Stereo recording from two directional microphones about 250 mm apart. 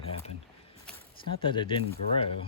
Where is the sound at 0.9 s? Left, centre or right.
Centre.